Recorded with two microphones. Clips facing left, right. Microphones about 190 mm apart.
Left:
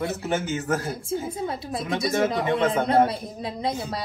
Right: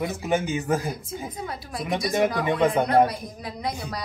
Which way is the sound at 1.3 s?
25° left (ahead or behind).